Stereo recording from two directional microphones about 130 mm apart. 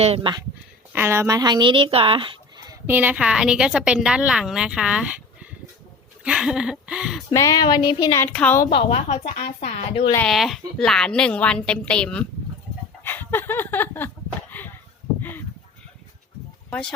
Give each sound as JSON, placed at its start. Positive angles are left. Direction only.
{"t": 0.0, "sound": "speech", "side_deg": -50}
{"t": 0.9, "sound": "speech", "side_deg": -20}
{"t": 2.8, "sound": "a woman's voice", "side_deg": -15}
{"t": 7.3, "sound": "speech", "side_deg": 30}
{"t": 8.2, "sound": "a woman's voice", "side_deg": 10}
{"t": 8.9, "sound": "speech", "side_deg": 55}
{"t": 10.2, "sound": "a woman's voice", "side_deg": 0}
{"t": 13.1, "sound": "a sound", "side_deg": 15}
{"t": 16.6, "sound": "speech", "side_deg": 5}